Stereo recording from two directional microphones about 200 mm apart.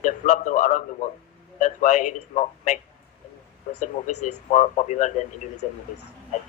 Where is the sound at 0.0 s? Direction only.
40° left (ahead or behind).